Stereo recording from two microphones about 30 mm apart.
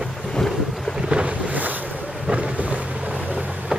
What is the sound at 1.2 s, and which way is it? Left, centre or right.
Boat, right.